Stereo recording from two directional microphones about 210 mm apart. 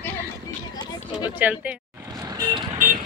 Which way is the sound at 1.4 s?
10° right (ahead or behind).